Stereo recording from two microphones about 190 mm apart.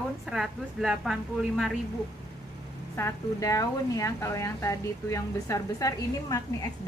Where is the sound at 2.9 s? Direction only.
15° left (ahead or behind).